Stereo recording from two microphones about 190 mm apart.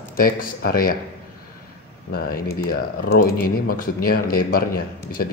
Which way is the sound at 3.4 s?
50° left (ahead or behind).